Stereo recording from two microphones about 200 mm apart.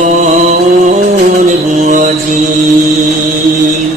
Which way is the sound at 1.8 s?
35° right (ahead or behind).